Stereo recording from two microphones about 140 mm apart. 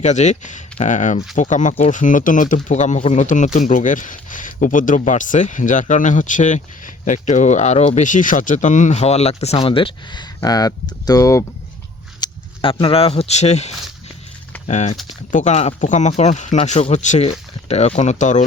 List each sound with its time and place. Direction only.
0.0 s speech: 55° left (ahead or behind); by 11.4 s 25° left (ahead or behind)
12.2 s speech: 40° left (ahead or behind); by 18.4 s 60° left (ahead or behind)